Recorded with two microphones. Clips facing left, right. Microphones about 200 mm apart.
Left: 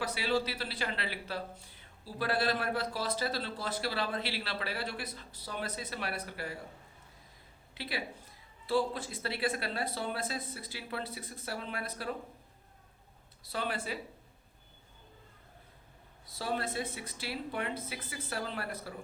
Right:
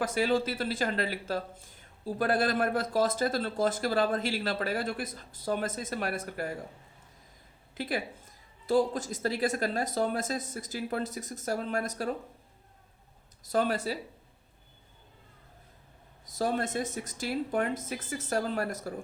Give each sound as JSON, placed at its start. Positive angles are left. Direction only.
{"t": 0.0, "sound": "speech", "side_deg": -50}
{"t": 7.7, "sound": "speech", "side_deg": -45}
{"t": 13.4, "sound": "speech", "side_deg": -45}
{"t": 16.2, "sound": "speech", "side_deg": -45}